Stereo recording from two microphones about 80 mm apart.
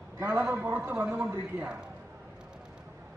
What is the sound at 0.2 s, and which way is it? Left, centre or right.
Speech, right.